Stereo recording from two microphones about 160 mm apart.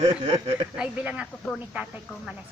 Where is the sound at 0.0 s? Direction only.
40° right (ahead or behind).